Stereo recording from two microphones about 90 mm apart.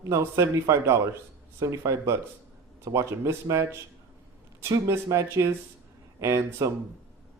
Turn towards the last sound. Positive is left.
turn(degrees=-35)  # may be behind; listen again after turning